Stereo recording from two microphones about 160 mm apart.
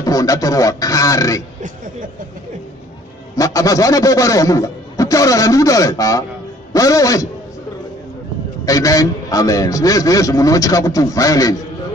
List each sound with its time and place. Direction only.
0.0 s a man's voice: 20° left (ahead or behind)
3.3 s a man's voice: 20° left (ahead or behind)
8.6 s a man's voice: 20° left (ahead or behind)